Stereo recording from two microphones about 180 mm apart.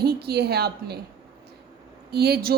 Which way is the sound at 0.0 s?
60° right (ahead or behind).